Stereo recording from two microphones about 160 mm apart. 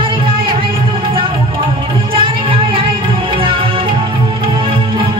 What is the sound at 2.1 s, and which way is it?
Music, 35° right (ahead or behind).